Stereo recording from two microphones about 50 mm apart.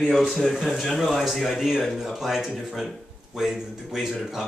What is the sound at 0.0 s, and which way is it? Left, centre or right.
Speech, centre.